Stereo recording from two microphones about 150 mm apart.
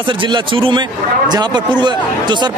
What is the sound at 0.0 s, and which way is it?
Speech, 35° right (ahead or behind).